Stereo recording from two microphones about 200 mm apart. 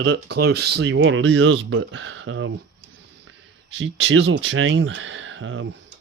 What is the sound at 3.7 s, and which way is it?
Speech, 65° right (ahead or behind).